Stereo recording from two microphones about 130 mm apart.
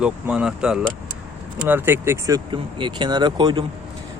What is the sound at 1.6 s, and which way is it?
A man's voice, 15° right (ahead or behind).